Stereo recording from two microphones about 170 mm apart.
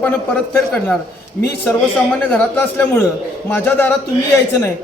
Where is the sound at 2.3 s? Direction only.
10° left (ahead or behind).